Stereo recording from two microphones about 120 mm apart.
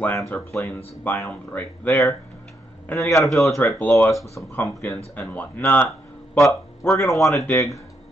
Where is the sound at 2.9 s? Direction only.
25° left (ahead or behind).